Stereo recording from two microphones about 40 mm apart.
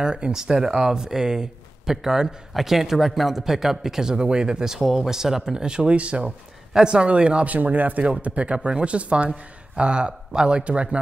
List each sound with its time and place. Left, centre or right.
0.0 s speech: right
4.7 s speech: centre; by 6.3 s right
6.7 s speech: centre
7.4 s speech: right